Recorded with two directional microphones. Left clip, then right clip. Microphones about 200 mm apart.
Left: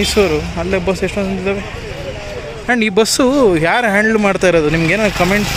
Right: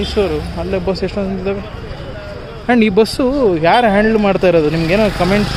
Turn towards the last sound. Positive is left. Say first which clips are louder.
# even
turn(degrees=0)  # may be behind; listen again after turning